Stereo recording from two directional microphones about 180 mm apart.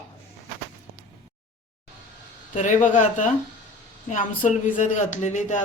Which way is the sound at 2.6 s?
45° left (ahead or behind).